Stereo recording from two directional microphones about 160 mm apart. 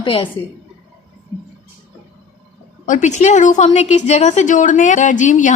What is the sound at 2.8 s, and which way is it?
A woman's voice, 50° left (ahead or behind).